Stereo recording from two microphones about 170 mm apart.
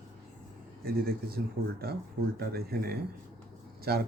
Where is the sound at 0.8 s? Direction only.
65° right (ahead or behind).